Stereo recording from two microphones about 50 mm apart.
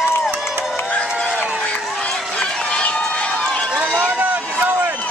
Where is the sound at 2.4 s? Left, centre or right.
Centre.